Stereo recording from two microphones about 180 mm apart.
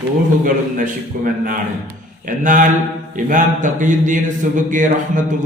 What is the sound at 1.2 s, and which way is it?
A man's voice, 50° right (ahead or behind).